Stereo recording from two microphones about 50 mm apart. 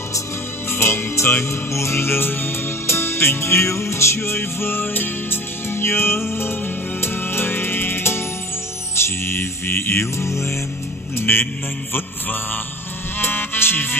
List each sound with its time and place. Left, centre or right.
0.7 s music: left
10.2 s music: left
11.1 s music: left
13.2 s music: left